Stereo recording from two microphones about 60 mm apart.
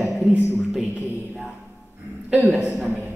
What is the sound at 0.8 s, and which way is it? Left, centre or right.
Speech, centre.